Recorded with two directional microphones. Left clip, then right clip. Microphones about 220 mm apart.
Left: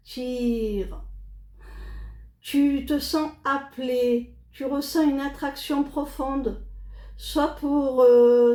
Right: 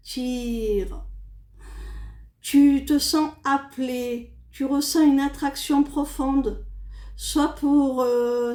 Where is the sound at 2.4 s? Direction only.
50° right (ahead or behind).